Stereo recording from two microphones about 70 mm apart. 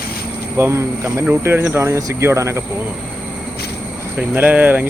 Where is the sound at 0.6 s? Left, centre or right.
Right.